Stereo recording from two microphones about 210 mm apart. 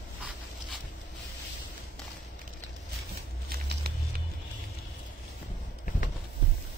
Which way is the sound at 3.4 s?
45° right (ahead or behind).